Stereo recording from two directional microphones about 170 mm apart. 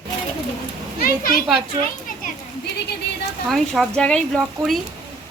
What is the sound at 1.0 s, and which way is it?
Speech, 60° left (ahead or behind).